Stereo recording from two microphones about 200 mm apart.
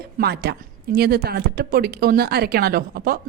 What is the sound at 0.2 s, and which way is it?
Speech, 55° right (ahead or behind).